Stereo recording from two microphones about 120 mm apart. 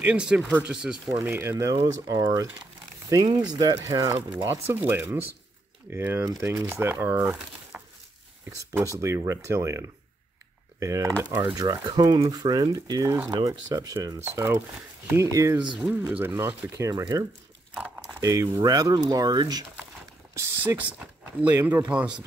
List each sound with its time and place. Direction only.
0.0 s speech: 10° right (ahead or behind)
1.2 s speech: 15° right (ahead or behind)
1.7 s speech: 35° right (ahead or behind)
3.4 s speech: 40° right (ahead or behind)
4.5 s speech: 20° right (ahead or behind)
7.7 s a sound: 15° right (ahead or behind)
9.0 s speech: 25° right (ahead or behind)
16.1 s speech: 15° right (ahead or behind); by 17.2 s 35° right (ahead or behind)
17.7 s speech: 10° right (ahead or behind)
18.0 s speech: 25° right (ahead or behind)
20.3 s speech: 15° right (ahead or behind)